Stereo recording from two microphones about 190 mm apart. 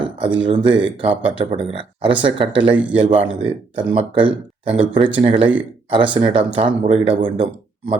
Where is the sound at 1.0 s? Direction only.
30° right (ahead or behind).